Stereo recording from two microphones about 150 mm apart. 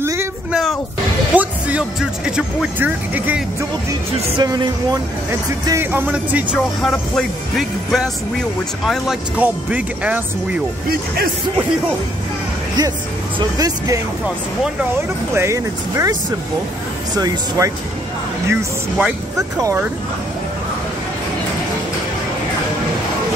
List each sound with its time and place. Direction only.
0.0 s a sound: 20° right (ahead or behind)
0.5 s music: centre (ahead or behind)
1.3 s speech: 10° right (ahead or behind)
4.4 s speech: 25° right (ahead or behind)
5.7 s speech: 15° right (ahead or behind)
13.6 s speech: 25° right (ahead or behind)
15.3 s speech: 20° right (ahead or behind)